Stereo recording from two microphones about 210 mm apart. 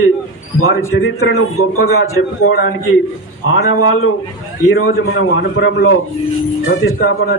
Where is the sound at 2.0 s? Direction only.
90° left.